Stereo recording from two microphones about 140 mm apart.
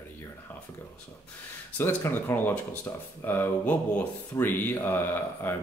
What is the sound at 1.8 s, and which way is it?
Speech, 15° left (ahead or behind).